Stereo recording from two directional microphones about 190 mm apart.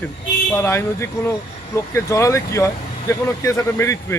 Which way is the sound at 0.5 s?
15° left (ahead or behind).